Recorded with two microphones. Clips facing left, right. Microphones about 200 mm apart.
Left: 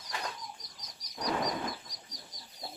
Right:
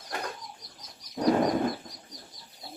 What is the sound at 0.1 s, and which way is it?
Bird, 50° right (ahead or behind).